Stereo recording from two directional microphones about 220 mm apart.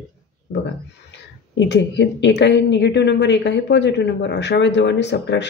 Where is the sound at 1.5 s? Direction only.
55° left (ahead or behind).